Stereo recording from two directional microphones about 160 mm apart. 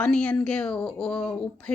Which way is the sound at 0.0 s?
5° left (ahead or behind).